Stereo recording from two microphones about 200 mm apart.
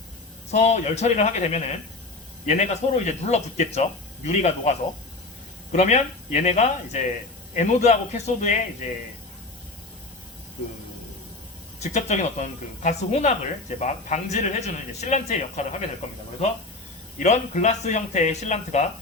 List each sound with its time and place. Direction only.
0.5 s speech: 35° left (ahead or behind)
5.7 s speech: 35° left (ahead or behind)
11.8 s speech: 35° left (ahead or behind)
17.2 s speech: 35° left (ahead or behind)